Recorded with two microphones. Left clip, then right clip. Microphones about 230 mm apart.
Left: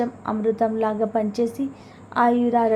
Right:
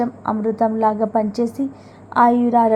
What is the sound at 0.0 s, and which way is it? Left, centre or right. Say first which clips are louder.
A woman's voice: right 3 dB; centre.